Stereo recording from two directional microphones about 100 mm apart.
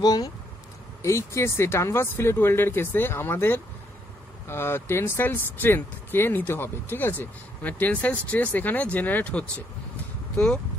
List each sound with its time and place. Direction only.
0.0 s speech: 40° left (ahead or behind)
1.0 s speech: 30° left (ahead or behind); by 10.6 s 10° left (ahead or behind)